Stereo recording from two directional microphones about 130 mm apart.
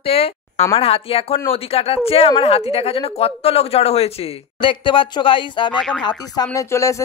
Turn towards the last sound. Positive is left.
turn(degrees=25)  # may be behind; listen again after turning